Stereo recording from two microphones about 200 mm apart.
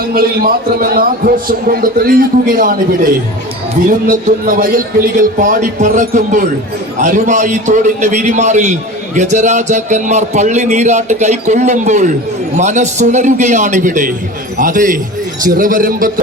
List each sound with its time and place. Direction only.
0.0 s a man's voice: 50° right (ahead or behind)
3.8 s a man's voice: 45° right (ahead or behind)